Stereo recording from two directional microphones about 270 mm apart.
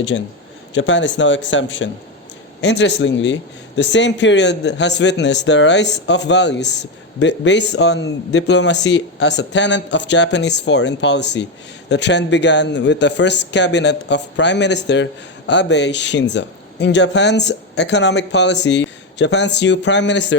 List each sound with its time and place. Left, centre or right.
0.1 s a man's voice: left